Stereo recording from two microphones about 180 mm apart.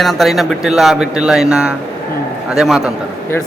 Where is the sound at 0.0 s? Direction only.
Centre (ahead or behind).